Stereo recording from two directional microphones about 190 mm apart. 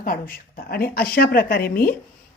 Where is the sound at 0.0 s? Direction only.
50° left (ahead or behind).